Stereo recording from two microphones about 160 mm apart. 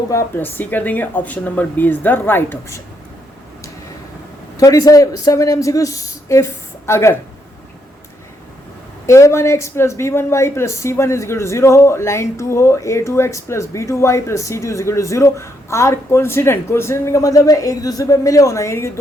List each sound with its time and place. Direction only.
0.1 s speech: 15° left (ahead or behind)
4.5 s speech: 20° left (ahead or behind)
9.0 s speech: 20° left (ahead or behind)